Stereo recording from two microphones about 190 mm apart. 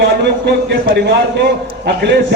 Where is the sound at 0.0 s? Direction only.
60° right (ahead or behind).